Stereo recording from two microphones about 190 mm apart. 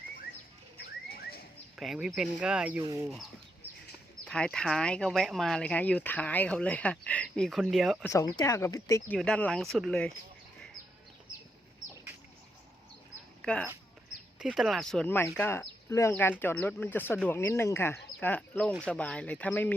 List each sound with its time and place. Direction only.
0.8 s rodents: 55° left (ahead or behind)
1.7 s speech: centre (ahead or behind)
4.3 s speech: 5° left (ahead or behind)
8.1 s speech: 20° left (ahead or behind)
9.0 s speech: 5° left (ahead or behind)
13.4 s speech: 5° left (ahead or behind)